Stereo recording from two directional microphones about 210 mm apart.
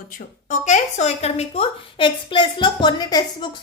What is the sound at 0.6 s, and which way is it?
A woman's voice, 35° left (ahead or behind).